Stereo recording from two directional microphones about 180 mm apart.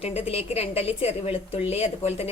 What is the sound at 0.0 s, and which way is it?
A woman's voice, 35° left (ahead or behind).